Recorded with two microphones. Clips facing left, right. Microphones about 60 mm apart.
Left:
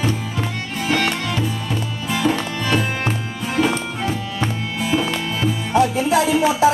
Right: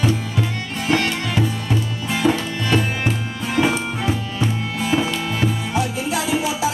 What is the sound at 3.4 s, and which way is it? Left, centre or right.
Music, centre.